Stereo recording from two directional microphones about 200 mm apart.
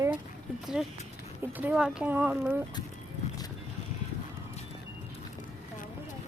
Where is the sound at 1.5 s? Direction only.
5° right (ahead or behind).